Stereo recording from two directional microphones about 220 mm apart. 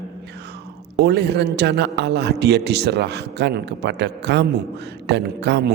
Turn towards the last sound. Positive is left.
turn(degrees=-50)  # may be behind; listen again after turning